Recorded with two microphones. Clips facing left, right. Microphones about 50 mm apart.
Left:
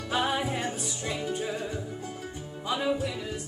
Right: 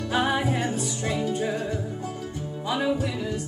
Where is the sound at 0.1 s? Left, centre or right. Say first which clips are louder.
Right 3 dB; centre.